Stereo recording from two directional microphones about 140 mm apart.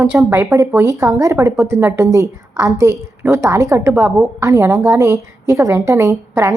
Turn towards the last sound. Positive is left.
turn(degrees=-20)  # may be behind; listen again after turning